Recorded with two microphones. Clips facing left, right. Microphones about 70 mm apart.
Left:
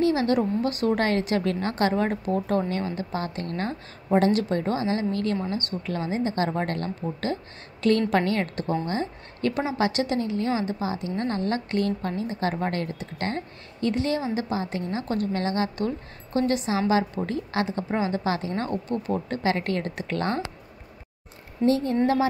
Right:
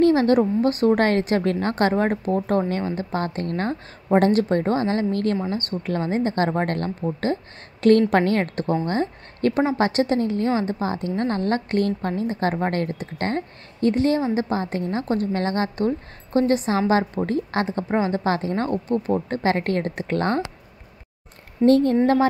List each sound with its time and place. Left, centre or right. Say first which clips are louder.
0.0 s a woman's voice: right 5 dB; right
21.6 s a woman's voice: right 6 dB; right